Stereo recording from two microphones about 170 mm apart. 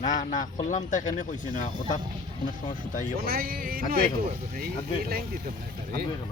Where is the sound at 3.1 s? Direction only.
60° right (ahead or behind).